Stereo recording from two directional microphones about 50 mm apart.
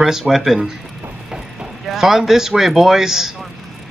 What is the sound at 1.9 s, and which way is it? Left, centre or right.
Speech, centre.